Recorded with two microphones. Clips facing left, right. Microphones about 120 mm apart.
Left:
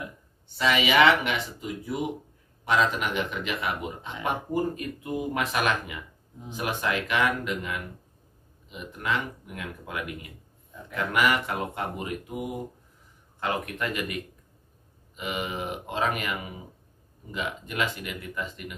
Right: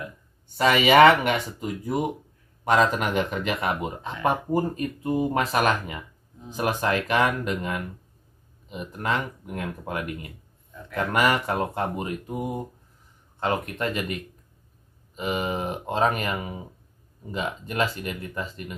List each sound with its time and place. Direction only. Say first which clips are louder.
0.6 s speech: right 6 dB; 50° right (ahead or behind); by 18.8 s 35° right (ahead or behind)